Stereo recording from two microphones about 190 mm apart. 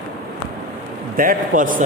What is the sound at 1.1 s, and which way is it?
Speech, 45° right (ahead or behind).